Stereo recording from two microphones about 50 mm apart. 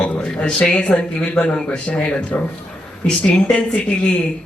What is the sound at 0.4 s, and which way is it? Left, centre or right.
Speech, left.